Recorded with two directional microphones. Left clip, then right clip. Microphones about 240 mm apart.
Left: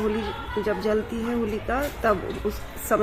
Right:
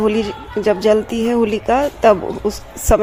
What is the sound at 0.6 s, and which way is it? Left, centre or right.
Speech, right.